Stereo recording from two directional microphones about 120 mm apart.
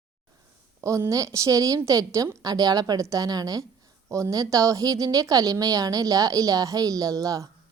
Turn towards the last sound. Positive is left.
turn(degrees=-30)  # may be behind; listen again after turning